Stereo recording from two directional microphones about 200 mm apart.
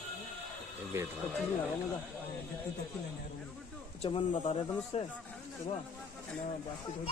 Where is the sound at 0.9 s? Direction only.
10° right (ahead or behind).